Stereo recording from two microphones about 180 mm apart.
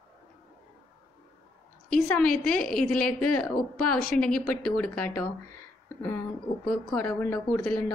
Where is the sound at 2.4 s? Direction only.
5° left (ahead or behind).